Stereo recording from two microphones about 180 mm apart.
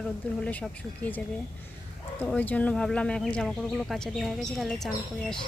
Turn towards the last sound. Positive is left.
turn(degrees=0)  # may be behind; listen again after turning